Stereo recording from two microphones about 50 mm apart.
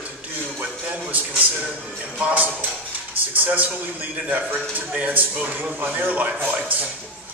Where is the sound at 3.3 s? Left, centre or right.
Right.